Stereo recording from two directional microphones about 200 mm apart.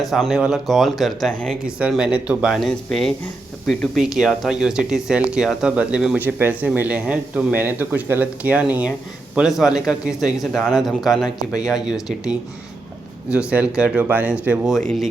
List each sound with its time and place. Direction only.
0.0 s speech: centre (ahead or behind)
13.3 s speech: 5° right (ahead or behind)